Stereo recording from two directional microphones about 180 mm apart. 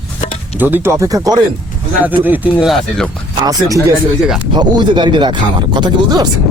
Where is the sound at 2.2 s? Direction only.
10° right (ahead or behind).